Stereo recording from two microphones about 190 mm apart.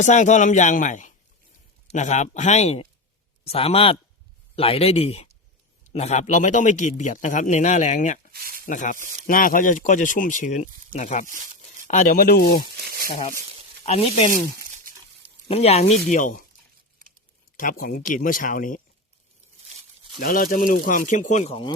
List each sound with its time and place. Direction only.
0.0 s speech: 40° left (ahead or behind)
8.3 s a sound: 50° right (ahead or behind)
8.6 s speech: 45° left (ahead or behind)
12.7 s speech: 55° right (ahead or behind)
13.8 s speech: 30° left (ahead or behind)
15.4 s speech: 35° left (ahead or behind)
17.6 s speech: 45° left (ahead or behind)
20.1 s speech: 45° left (ahead or behind)